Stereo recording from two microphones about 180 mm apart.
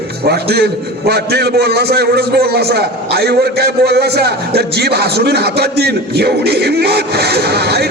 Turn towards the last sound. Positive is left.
turn(degrees=-65)  # may be behind; listen again after turning